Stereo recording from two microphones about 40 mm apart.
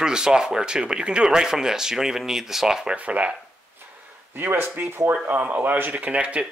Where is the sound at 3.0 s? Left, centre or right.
Right.